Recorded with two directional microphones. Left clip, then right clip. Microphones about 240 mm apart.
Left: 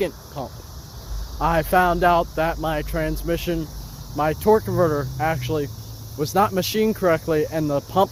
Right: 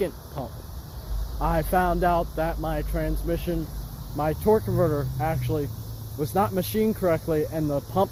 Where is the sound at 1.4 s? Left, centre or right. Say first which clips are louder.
Left 5 dB; centre.